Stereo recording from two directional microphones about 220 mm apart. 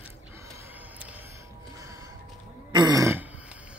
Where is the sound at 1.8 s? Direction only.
15° right (ahead or behind).